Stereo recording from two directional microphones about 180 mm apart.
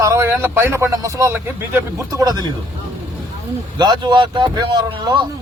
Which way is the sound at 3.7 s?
25° right (ahead or behind).